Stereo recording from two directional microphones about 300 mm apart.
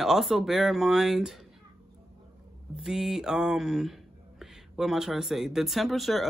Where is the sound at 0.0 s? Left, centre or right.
Centre.